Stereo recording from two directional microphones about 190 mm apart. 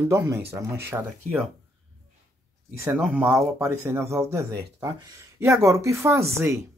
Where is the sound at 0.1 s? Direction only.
15° right (ahead or behind).